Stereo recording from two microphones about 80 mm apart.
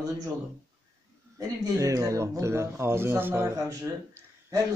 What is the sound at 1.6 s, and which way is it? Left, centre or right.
Speech, right.